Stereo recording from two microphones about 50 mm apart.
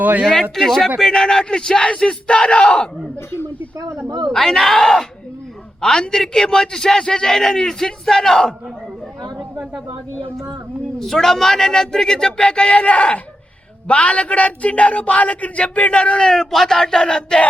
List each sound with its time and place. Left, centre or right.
0.0 s speech: right
0.5 s a man's voice: centre
3.8 s speech: right
4.3 s a man's voice: centre
11.0 s a man's voice: centre